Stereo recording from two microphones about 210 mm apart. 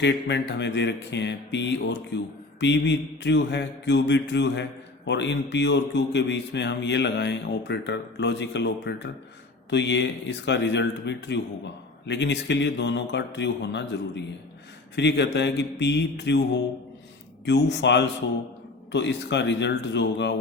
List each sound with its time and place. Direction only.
0.0 s speech: 55° left (ahead or behind)
14.9 s speech: 55° left (ahead or behind)
17.4 s speech: 55° left (ahead or behind)